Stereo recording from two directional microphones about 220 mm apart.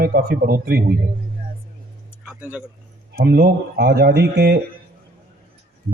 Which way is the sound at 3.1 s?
45° right (ahead or behind).